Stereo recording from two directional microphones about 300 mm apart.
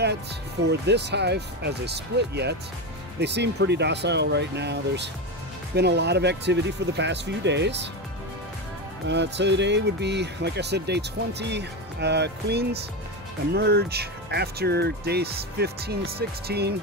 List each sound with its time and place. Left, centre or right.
0.7 s speech: right
9.0 s speech: right